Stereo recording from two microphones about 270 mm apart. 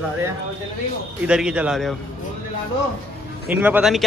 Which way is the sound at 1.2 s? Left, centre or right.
Centre.